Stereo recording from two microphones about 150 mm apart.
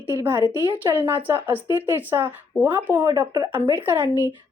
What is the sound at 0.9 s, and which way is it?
Speech, 10° right (ahead or behind).